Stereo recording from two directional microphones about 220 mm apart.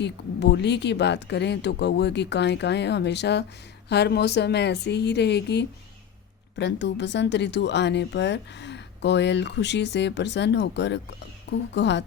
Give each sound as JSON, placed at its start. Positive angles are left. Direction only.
{"t": 0.0, "sound": "speech", "side_deg": 50}